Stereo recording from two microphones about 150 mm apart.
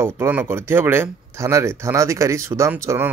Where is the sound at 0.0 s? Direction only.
15° right (ahead or behind).